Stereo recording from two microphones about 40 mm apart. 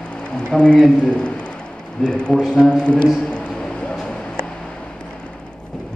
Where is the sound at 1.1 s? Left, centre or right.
Left.